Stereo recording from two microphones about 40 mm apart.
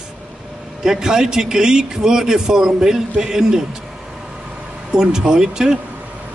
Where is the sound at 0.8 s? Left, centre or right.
Centre.